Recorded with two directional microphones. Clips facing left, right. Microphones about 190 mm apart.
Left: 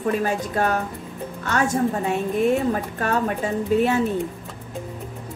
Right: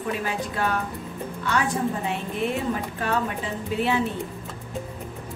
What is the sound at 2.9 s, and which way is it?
Speech, 45° left (ahead or behind).